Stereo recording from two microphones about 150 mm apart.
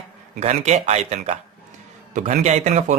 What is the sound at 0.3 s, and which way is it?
Speech, 45° right (ahead or behind).